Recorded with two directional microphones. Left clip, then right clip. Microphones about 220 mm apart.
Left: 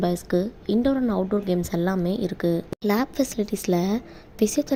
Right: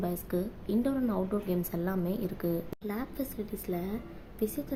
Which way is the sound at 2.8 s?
40° left (ahead or behind).